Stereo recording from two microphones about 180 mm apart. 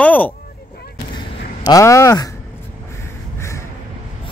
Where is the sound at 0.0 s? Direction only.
10° left (ahead or behind).